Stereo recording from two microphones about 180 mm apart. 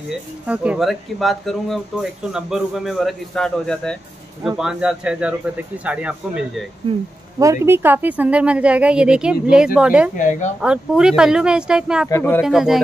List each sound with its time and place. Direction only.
0.1 s speech: 5° right (ahead or behind)
7.3 s speech: 15° right (ahead or behind)
10.1 s speech: 45° left (ahead or behind)
10.6 s speech: 5° right (ahead or behind)
12.1 s speech: 10° left (ahead or behind)
12.4 s speech: centre (ahead or behind)